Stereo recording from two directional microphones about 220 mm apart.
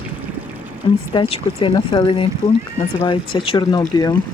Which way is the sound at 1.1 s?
25° left (ahead or behind).